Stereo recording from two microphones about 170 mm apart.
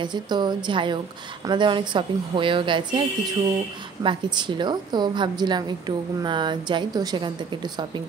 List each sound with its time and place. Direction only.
0.0 s a woman's voice: 25° right (ahead or behind)
4.0 s a woman's voice: 25° right (ahead or behind)